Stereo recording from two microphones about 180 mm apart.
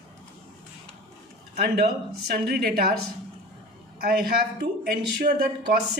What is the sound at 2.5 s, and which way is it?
Speech, 55° right (ahead or behind).